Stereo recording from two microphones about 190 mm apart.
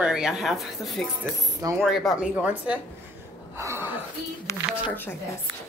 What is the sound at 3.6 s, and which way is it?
Chuckle, 15° right (ahead or behind).